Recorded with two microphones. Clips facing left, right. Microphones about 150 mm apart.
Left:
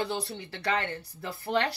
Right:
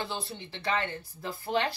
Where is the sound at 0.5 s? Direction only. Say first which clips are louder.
Left 1 dB; 65° left (ahead or behind).